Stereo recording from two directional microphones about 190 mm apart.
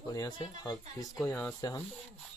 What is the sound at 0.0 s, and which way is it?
Speech, 20° left (ahead or behind).